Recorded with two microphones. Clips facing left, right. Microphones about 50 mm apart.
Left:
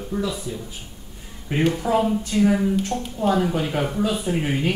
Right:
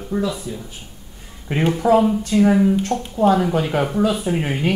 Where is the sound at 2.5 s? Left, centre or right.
Centre.